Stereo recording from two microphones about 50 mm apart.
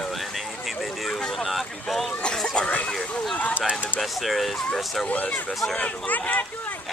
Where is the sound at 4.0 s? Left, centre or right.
Centre.